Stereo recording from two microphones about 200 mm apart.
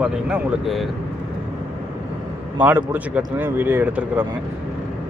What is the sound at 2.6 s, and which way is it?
Speech, 10° right (ahead or behind).